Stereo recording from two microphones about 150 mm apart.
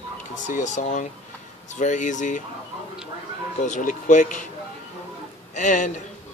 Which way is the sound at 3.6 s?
60° left (ahead or behind).